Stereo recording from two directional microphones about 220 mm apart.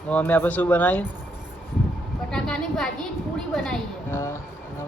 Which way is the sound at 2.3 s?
5° left (ahead or behind).